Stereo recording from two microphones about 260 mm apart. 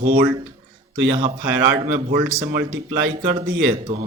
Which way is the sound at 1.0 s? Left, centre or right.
Right.